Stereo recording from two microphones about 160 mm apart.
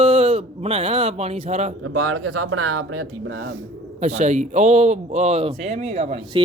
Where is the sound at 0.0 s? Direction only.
35° right (ahead or behind).